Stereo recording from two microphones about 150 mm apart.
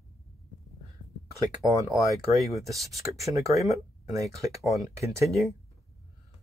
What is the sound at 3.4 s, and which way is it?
Speech, 20° right (ahead or behind).